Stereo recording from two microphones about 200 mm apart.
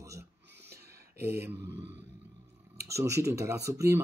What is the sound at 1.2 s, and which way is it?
Speech, 10° right (ahead or behind).